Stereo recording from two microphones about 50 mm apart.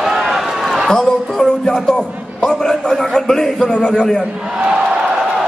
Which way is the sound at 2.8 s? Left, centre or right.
Centre.